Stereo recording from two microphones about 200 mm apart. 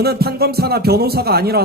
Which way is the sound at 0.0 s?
50° right (ahead or behind).